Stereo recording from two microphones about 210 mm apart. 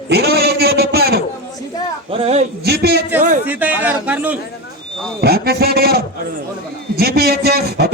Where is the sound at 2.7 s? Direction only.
50° right (ahead or behind).